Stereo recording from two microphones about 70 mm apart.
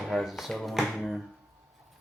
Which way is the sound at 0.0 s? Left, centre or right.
Centre.